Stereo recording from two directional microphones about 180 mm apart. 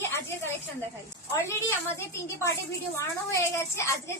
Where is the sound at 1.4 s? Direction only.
15° left (ahead or behind).